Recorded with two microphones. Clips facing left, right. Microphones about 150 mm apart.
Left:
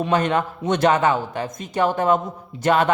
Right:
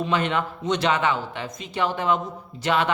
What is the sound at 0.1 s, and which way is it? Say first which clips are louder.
A man's voice: left 6 dB; 40° left (ahead or behind).